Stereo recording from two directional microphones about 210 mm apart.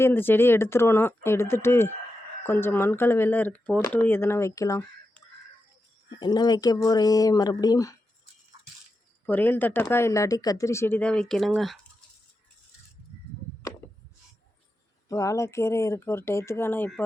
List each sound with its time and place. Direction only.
0.0 s speech: 10° left (ahead or behind)
6.1 s speech: 20° left (ahead or behind)
9.2 s speech: 10° left (ahead or behind)
15.1 s speech: 15° left (ahead or behind)